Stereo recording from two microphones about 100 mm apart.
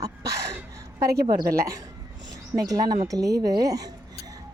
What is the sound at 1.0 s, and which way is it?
Speech, 40° right (ahead or behind).